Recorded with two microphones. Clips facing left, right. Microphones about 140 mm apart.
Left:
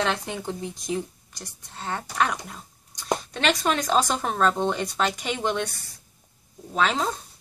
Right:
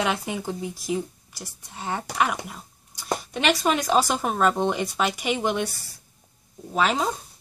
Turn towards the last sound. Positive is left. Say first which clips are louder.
# right 1 dB
turn(degrees=-5)  # may be behind; listen again after turning